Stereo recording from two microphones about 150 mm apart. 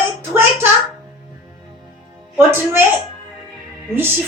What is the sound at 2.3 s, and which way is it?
Speech, 15° right (ahead or behind).